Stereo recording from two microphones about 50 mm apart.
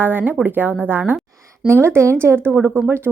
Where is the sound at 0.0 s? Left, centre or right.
Right.